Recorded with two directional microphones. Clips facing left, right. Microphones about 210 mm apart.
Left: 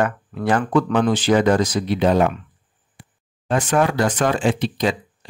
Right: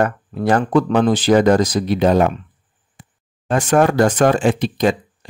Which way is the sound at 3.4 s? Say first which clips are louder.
Right 4 dB; 45° right (ahead or behind).